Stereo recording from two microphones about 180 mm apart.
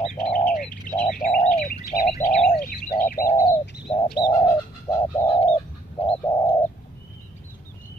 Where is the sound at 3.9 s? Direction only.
35° left (ahead or behind).